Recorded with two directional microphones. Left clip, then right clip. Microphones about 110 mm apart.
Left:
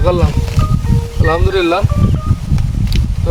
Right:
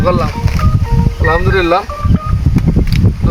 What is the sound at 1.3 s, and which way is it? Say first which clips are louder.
Speech: right 2 dB; 20° left (ahead or behind).